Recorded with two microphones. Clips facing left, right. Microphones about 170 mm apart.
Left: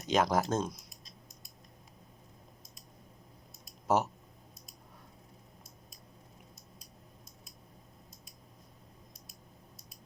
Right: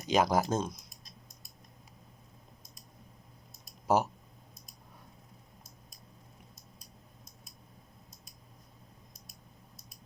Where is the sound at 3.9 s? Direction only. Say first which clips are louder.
Right 1 dB; centre (ahead or behind).